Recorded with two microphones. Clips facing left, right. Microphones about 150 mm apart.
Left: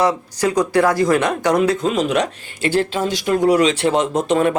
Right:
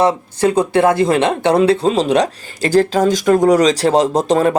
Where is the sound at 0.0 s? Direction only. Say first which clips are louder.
Right 3 dB; 25° right (ahead or behind).